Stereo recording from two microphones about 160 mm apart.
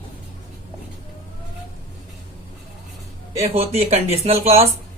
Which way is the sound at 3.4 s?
40° right (ahead or behind).